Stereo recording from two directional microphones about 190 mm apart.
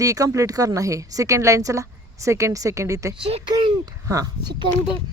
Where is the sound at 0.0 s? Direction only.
15° right (ahead or behind).